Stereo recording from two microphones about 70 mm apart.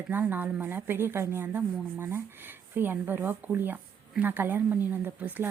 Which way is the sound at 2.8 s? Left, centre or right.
Right.